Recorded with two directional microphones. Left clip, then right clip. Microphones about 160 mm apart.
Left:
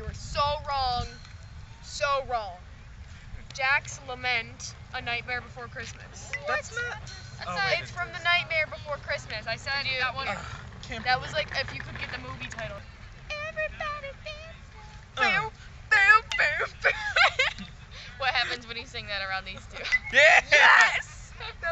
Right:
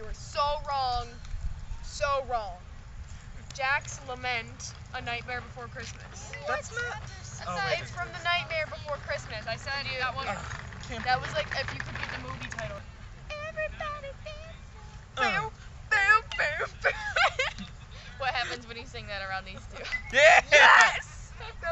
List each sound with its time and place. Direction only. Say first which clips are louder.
0.2 s child singing: left 1 dB; centre (ahead or behind)
1.9 s a sound: left 2 dB; centre (ahead or behind)
3.5 s speech: left 3 dB; centre (ahead or behind)
11.6 s speech: even; 30° right (ahead or behind)
13.3 s music: left 2 dB; 5° left (ahead or behind)
15.1 s a sound: left 3 dB; centre (ahead or behind)
16.3 s speech: left 4 dB; centre (ahead or behind)